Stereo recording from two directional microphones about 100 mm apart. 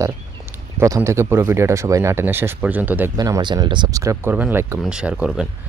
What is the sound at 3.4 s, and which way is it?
Speech, 50° right (ahead or behind).